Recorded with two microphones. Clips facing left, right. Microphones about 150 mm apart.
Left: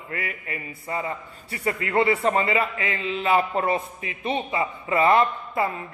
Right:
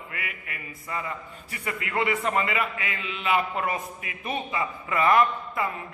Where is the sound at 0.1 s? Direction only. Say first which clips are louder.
Left 9 dB; 35° left (ahead or behind).